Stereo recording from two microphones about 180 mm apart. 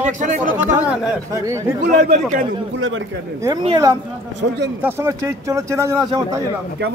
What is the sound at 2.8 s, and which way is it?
Speech, 90° right.